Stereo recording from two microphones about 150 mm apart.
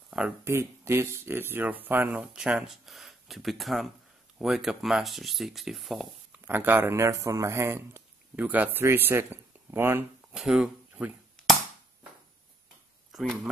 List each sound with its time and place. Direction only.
0.5 s speech: 15° right (ahead or behind); by 6.0 s centre (ahead or behind)
6.4 s speech: 15° right (ahead or behind)
10.3 s speech: 5° right (ahead or behind)
13.1 s speech: centre (ahead or behind)